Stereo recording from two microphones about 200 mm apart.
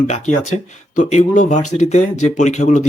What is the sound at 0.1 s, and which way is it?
Speech, 35° left (ahead or behind).